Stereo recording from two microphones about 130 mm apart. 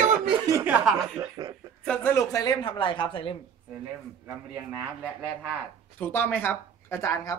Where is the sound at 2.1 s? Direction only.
25° left (ahead or behind); by 3.4 s 40° left (ahead or behind).